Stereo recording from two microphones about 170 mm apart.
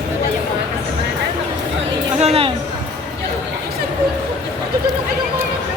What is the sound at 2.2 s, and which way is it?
Chatter, 35° right (ahead or behind).